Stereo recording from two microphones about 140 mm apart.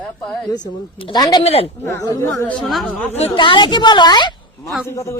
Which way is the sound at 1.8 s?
20° left (ahead or behind).